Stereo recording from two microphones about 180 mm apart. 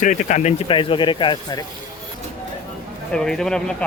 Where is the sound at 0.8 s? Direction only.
25° left (ahead or behind).